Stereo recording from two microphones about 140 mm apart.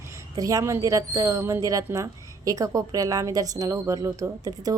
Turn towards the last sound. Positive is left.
turn(degrees=-25)  # may be behind; listen again after turning